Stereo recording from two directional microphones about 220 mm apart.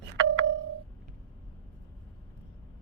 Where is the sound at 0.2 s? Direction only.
55° right (ahead or behind).